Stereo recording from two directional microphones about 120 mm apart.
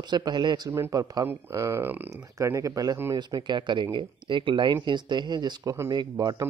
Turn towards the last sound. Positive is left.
turn(degrees=-35)  # may be behind; listen again after turning